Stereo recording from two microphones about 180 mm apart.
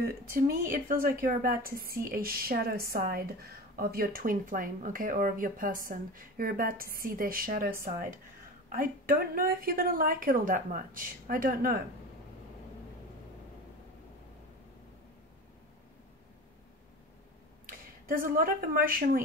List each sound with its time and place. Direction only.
0.0 s a woman's voice: 55° right (ahead or behind)
17.6 s speech: 50° right (ahead or behind)